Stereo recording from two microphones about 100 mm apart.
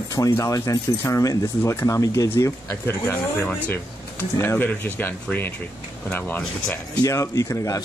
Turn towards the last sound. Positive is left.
turn(degrees=30)  # may be behind; listen again after turning